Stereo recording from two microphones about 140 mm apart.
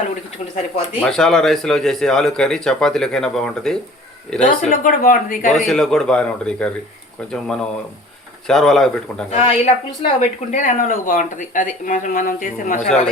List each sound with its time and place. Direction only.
0.9 s speech: 5° left (ahead or behind)
4.4 s speech: 75° left (ahead or behind)
5.6 s speech: 5° left (ahead or behind)
9.3 s speech: 55° left (ahead or behind)
10.5 s speech: 65° left (ahead or behind)